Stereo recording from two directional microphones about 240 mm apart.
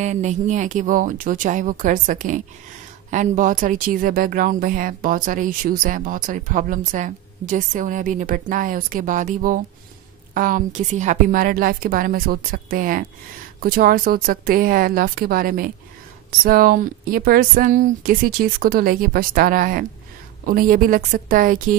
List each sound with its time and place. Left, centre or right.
0.0 s speech: right